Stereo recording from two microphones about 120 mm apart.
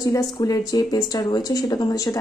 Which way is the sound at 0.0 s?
30° left (ahead or behind).